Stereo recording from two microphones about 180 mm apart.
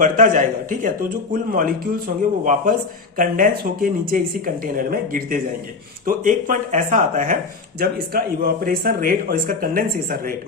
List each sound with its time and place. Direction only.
0.0 s speech: 45° right (ahead or behind)
7.8 s speech: 55° right (ahead or behind)